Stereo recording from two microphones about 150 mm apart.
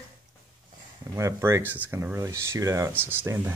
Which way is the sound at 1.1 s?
20° right (ahead or behind).